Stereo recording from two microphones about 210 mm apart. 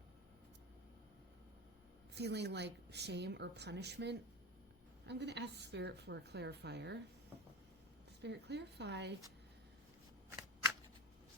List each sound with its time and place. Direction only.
2.1 s a woman's voice: 55° right (ahead or behind)
8.2 s a woman's voice: 55° right (ahead or behind)